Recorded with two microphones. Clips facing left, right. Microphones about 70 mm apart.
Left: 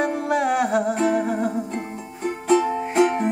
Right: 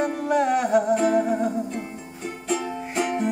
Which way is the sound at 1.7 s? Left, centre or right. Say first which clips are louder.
Left 2 dB; left.